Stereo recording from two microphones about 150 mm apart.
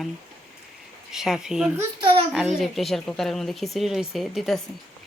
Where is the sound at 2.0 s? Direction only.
35° right (ahead or behind).